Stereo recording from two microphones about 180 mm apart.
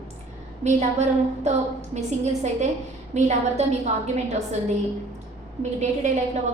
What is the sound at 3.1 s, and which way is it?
Speech, 40° right (ahead or behind).